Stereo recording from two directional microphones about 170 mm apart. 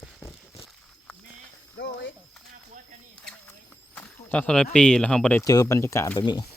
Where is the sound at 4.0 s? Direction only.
10° left (ahead or behind).